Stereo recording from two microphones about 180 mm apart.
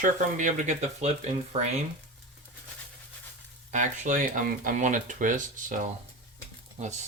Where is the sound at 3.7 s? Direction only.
45° right (ahead or behind).